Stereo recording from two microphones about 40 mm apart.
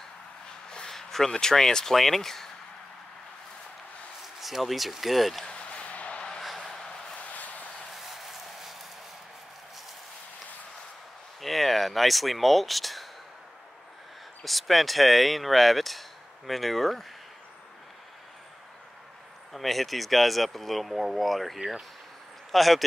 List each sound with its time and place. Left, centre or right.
0.7 s speech: centre
4.4 s speech: centre
5.5 s basketball bounce: left
6.4 s a sound: centre
7.2 s a sound: left
8.1 s a sound: centre
11.4 s speech: centre
14.4 s speech: centre
19.5 s speech: centre